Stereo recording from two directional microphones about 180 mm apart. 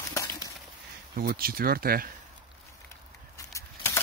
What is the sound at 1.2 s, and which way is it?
Speech, 55° right (ahead or behind).